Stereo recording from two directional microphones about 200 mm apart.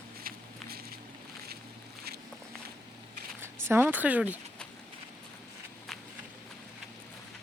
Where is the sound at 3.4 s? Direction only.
10° right (ahead or behind).